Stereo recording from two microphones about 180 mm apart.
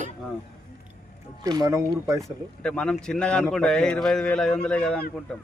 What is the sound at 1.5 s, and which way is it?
Speech, 20° right (ahead or behind).